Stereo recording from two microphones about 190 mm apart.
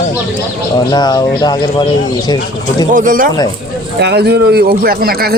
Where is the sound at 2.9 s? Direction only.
45° right (ahead or behind).